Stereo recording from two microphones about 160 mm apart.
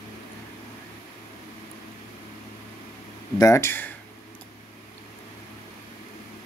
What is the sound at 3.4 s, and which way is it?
Speech, 20° left (ahead or behind).